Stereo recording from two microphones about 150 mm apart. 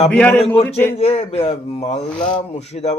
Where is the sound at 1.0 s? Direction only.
45° left (ahead or behind).